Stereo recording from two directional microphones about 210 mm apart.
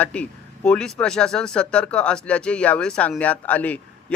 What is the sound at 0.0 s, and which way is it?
Speech, 5° left (ahead or behind).